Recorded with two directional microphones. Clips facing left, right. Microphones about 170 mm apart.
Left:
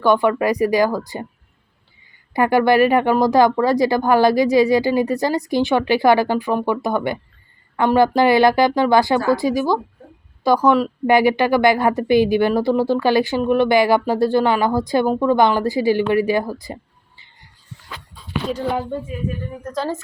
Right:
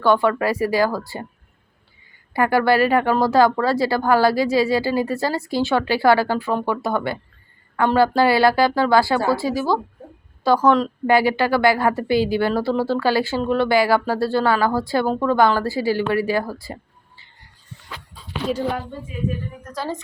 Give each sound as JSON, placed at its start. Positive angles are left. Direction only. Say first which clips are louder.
{"t": 0.0, "sound": "a woman's voice", "louder": "left 2 dB", "side_deg": 15}
{"t": 2.3, "sound": "a woman's voice", "louder": "left 2 dB", "side_deg": 20}
{"t": 19.7, "sound": "a woman's voice", "louder": "left 4 dB", "side_deg": -5}